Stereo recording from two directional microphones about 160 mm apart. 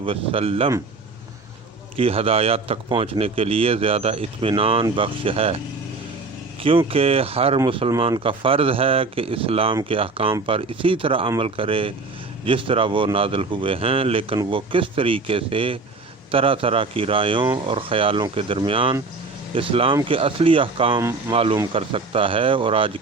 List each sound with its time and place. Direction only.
0.0 s speech: 35° right (ahead or behind)
2.0 s speech: 35° right (ahead or behind)
6.6 s speech: 35° right (ahead or behind)